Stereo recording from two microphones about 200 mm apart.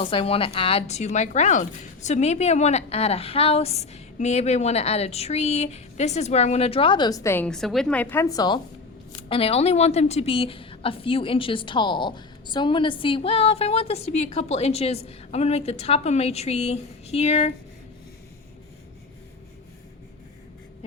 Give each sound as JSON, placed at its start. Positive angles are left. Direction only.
{"t": 0.0, "sound": "a woman's voice", "side_deg": 30}